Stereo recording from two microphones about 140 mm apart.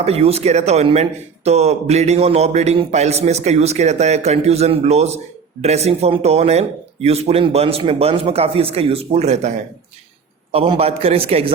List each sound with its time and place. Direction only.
0.0 s speech: 45° right (ahead or behind)
10.5 s speech: 40° right (ahead or behind)